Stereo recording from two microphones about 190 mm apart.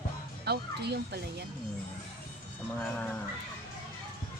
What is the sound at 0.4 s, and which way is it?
Speech, 60° right (ahead or behind).